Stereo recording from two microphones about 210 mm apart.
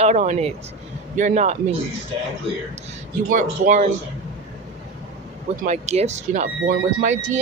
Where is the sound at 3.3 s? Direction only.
35° right (ahead or behind).